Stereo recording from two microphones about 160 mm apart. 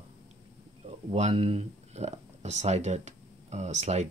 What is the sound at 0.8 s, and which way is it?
Speech, 40° right (ahead or behind).